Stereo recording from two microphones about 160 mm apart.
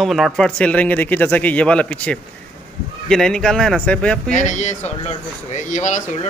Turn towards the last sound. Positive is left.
turn(degrees=50)  # may be behind; listen again after turning